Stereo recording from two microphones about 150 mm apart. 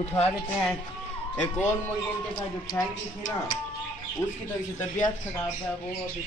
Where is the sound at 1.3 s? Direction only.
10° left (ahead or behind).